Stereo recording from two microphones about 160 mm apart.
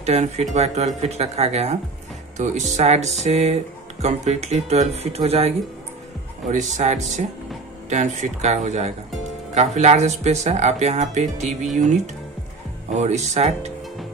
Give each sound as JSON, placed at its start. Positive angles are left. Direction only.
{"t": 0.0, "sound": "speech", "side_deg": -40}
{"t": 6.5, "sound": "speech", "side_deg": -50}